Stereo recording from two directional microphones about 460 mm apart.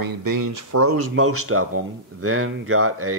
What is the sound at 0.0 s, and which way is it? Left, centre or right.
Speech, right.